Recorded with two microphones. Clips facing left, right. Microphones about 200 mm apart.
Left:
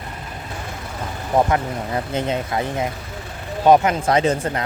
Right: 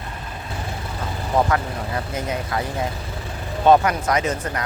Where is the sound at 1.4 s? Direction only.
20° left (ahead or behind).